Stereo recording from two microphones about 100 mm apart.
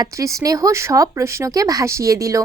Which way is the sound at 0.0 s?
35° right (ahead or behind).